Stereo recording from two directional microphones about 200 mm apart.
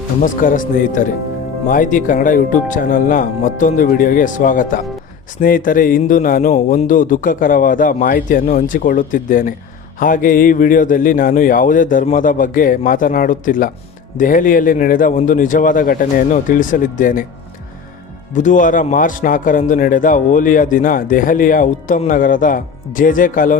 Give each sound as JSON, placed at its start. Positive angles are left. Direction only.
{"t": 0.2, "sound": "a man's voice", "side_deg": 45}
{"t": 18.3, "sound": "a man's voice", "side_deg": 40}